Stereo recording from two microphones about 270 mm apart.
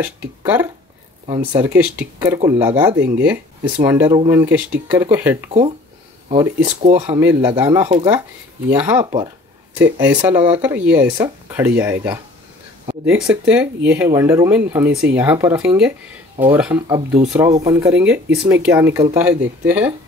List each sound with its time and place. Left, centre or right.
0.0 s speech: centre
6.6 s speech: right
7.2 s speech: centre